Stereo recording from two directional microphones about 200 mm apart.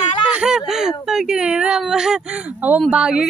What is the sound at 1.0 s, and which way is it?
Speech, 5° right (ahead or behind).